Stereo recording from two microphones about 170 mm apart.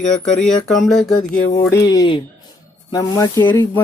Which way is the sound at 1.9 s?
25° left (ahead or behind).